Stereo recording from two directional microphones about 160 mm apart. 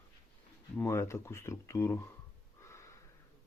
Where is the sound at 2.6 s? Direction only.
15° left (ahead or behind).